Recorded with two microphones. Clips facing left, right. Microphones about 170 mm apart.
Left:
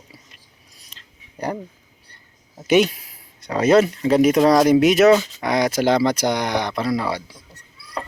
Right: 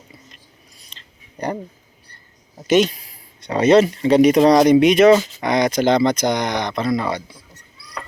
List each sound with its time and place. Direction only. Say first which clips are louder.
0.9 s a sound: right 1 dB; 5° left (ahead or behind)
1.4 s speech: right 1 dB; 5° left (ahead or behind)
2.6 s speech: right 1 dB; 10° left (ahead or behind)